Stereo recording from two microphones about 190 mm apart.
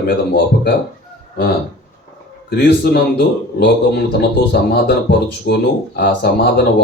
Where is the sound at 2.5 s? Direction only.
55° left (ahead or behind).